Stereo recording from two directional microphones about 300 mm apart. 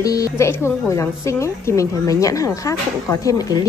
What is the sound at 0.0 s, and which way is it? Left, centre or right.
A woman's voice, centre.